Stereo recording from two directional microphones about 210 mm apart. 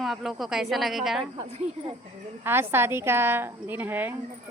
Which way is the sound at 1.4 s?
25° right (ahead or behind).